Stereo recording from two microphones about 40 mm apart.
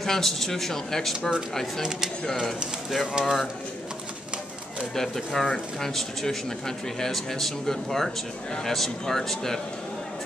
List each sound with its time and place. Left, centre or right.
0.0 s speech: centre
1.8 s speech: centre
3.1 s speech: centre
4.9 s speech: centre